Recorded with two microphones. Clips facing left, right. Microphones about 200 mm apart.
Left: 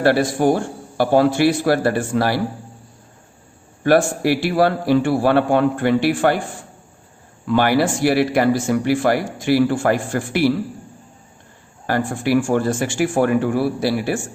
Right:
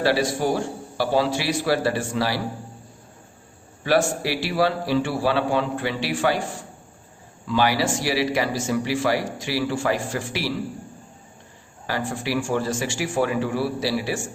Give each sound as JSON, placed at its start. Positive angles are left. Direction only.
{"t": 0.0, "sound": "speech", "side_deg": 55}
{"t": 3.8, "sound": "a man's voice", "side_deg": 55}
{"t": 7.4, "sound": "speech", "side_deg": 55}
{"t": 11.9, "sound": "speech", "side_deg": 50}